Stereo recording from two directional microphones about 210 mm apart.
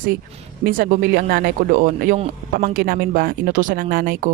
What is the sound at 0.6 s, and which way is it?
Speech, 40° right (ahead or behind).